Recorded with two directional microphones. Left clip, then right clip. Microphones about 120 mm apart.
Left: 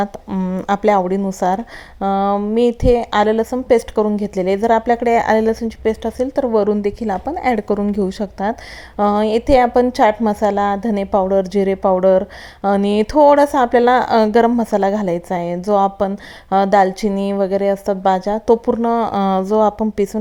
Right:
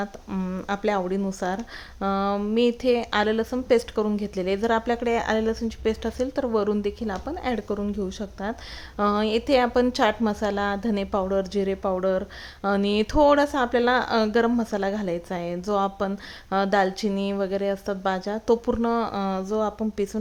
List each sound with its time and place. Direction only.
0.3 s speech: 30° left (ahead or behind)
0.6 s a woman's voice: 45° left (ahead or behind)
5.8 s a woman's voice: 25° left (ahead or behind); by 8.5 s 45° left (ahead or behind)
9.0 s a woman's voice: 30° left (ahead or behind)
19.1 s speech: 50° left (ahead or behind)